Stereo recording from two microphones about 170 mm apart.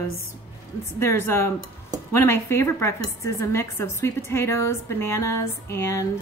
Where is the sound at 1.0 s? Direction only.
15° left (ahead or behind).